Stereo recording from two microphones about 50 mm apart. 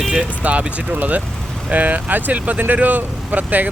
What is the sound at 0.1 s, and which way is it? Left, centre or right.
Speech, right.